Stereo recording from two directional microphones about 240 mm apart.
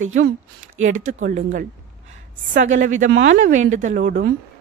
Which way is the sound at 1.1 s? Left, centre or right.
Right.